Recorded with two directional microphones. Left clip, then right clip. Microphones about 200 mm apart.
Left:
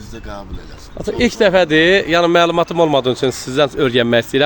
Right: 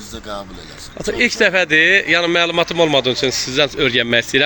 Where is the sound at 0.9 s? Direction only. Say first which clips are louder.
Even; 25° left (ahead or behind).